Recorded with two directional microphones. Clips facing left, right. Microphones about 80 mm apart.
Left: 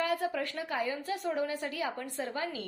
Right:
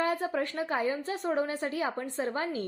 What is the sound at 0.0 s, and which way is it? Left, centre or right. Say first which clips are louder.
A woman's voice: right 2 dB; right.